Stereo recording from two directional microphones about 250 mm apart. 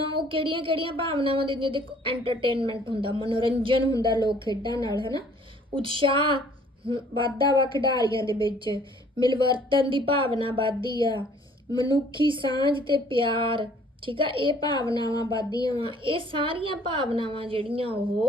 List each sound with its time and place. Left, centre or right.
0.1 s a woman's voice: centre
11.7 s speech: centre
11.9 s a woman's voice: centre
14.8 s speech: centre
15.7 s a woman's voice: centre